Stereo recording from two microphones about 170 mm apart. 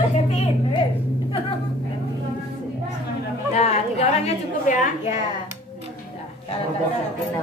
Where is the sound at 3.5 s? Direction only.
40° left (ahead or behind).